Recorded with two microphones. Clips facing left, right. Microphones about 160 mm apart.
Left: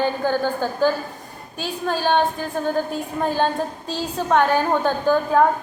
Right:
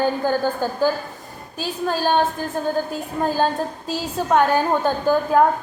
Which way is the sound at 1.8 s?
10° right (ahead or behind).